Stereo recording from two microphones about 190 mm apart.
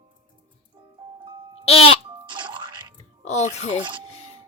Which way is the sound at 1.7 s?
30° left (ahead or behind).